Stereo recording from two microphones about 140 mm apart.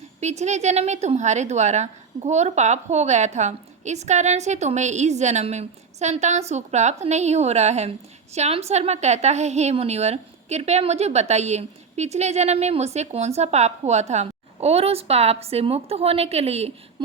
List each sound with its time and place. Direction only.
0.2 s a woman's voice: 55° right (ahead or behind)